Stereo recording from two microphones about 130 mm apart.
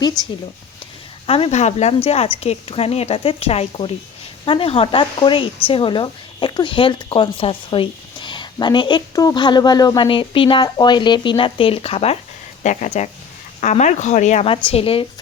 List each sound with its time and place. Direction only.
1.3 s a woman's voice: 55° left (ahead or behind)
12.6 s speech: 65° left (ahead or behind)
14.4 s a woman's voice: 45° left (ahead or behind)